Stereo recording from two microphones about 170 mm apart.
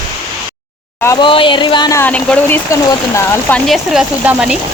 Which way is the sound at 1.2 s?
30° left (ahead or behind).